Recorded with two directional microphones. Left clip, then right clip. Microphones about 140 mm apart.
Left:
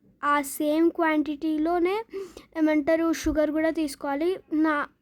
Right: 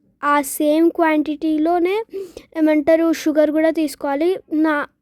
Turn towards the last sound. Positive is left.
turn(degrees=-40)  # may be behind; listen again after turning